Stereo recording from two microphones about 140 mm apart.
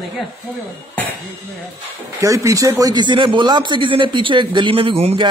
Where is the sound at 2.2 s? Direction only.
25° right (ahead or behind); by 5.2 s 40° right (ahead or behind).